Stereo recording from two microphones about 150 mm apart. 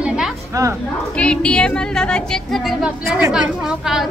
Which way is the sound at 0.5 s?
20° right (ahead or behind).